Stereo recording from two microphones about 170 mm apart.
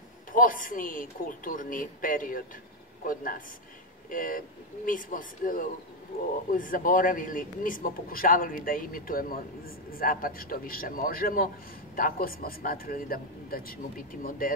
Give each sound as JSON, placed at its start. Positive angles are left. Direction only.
{"t": 0.3, "sound": "a man's voice", "side_deg": 55}